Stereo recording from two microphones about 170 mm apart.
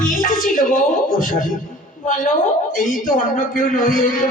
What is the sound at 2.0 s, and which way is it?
A man's voice, 50° left (ahead or behind).